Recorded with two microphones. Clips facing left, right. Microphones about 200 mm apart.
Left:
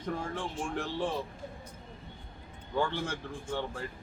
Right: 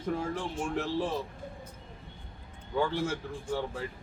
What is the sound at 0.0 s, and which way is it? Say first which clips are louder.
A man's voice: right 3 dB; 5° right (ahead or behind).